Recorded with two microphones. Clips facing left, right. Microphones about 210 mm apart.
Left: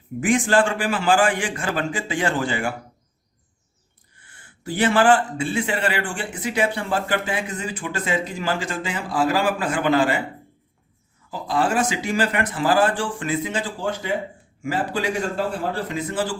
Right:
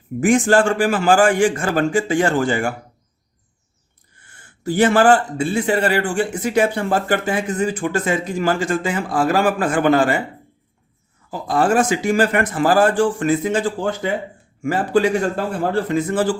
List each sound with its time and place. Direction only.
0.2 s a man's voice: 45° right (ahead or behind)
4.2 s a man's voice: 45° right (ahead or behind)
11.3 s a man's voice: 50° right (ahead or behind)